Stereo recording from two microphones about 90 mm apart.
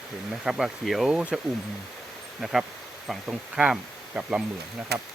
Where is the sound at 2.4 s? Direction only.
5° right (ahead or behind).